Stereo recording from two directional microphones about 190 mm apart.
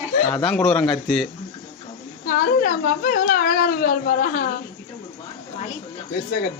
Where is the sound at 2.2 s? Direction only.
45° left (ahead or behind).